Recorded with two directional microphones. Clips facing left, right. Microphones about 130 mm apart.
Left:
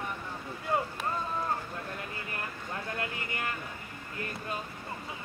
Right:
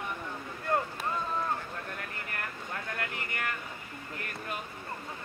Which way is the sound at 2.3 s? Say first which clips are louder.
Right 1 dB; 20° left (ahead or behind).